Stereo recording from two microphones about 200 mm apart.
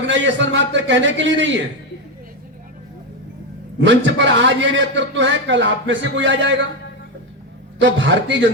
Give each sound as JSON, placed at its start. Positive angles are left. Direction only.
{"t": 0.1, "sound": "a man's voice", "side_deg": -65}
{"t": 3.8, "sound": "a man's voice", "side_deg": -60}
{"t": 7.8, "sound": "a man's voice", "side_deg": -65}